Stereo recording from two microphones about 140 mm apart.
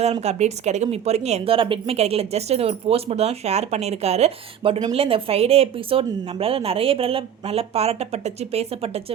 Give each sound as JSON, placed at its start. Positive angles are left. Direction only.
{"t": 0.0, "sound": "speech", "side_deg": -50}